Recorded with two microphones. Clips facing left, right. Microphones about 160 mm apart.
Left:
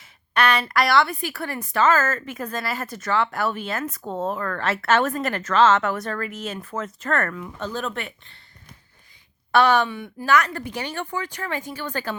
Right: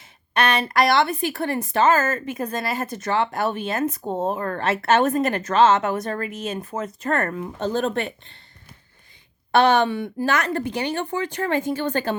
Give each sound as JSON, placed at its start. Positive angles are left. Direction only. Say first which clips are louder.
{"t": 0.0, "sound": "a woman's voice", "louder": "even", "side_deg": -20}
{"t": 7.3, "sound": "speech", "louder": "right 5 dB", "side_deg": -35}
{"t": 9.5, "sound": "speech", "louder": "right 2 dB", "side_deg": -25}